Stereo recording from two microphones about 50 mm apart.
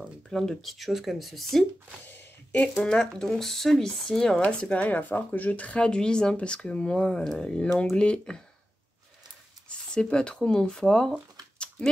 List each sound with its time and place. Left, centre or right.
0.3 s speech: centre
2.0 s a sound: left
2.7 s speech: centre
4.5 s speech: left
9.7 s speech: centre
11.5 s a sound: centre